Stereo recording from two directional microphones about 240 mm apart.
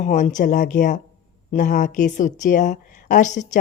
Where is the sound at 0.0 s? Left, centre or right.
Left.